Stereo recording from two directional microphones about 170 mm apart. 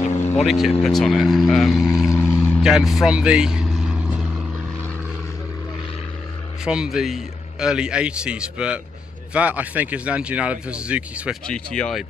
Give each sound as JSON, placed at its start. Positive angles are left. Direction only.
{"t": 0.0, "sound": "vehicle", "side_deg": 40}
{"t": 0.5, "sound": "a man's voice", "side_deg": 0}
{"t": 2.0, "sound": "vehicle", "side_deg": 10}
{"t": 2.6, "sound": "speech", "side_deg": 0}
{"t": 6.6, "sound": "a man's voice", "side_deg": -5}
{"t": 11.4, "sound": "a man's voice", "side_deg": 5}